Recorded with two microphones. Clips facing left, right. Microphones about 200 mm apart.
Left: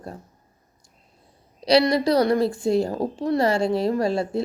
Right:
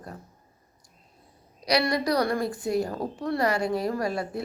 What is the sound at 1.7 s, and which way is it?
A woman's voice, 25° left (ahead or behind).